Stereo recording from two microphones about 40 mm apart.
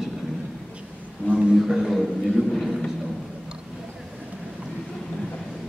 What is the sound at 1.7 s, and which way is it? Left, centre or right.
A man's voice, centre.